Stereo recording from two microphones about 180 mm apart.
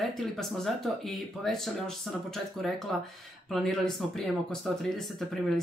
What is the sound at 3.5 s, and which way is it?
Speech, centre (ahead or behind).